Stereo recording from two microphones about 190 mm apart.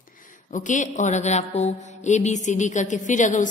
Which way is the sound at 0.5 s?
40° left (ahead or behind).